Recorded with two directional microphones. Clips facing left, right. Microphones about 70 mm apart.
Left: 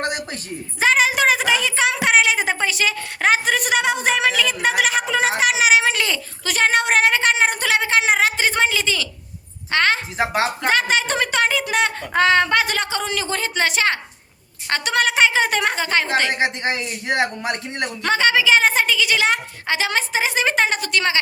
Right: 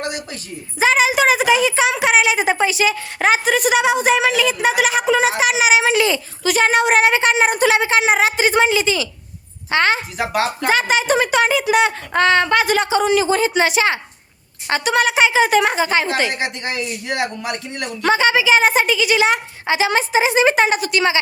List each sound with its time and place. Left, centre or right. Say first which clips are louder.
0.0 s a sound: left 1 dB; left
0.8 s a woman's voice: right 2 dB; centre
10.2 s speech: right 1 dB; left
10.7 s a woman's voice: right 5 dB; centre
12.1 s speech: right 1 dB; centre
12.7 s a woman's voice: right 8 dB; centre
16.3 s speech: left 2 dB; left
18.0 s a woman's voice: right 3 dB; centre